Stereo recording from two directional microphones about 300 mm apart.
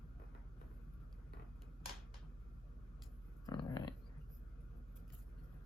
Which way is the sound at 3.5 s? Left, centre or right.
Centre.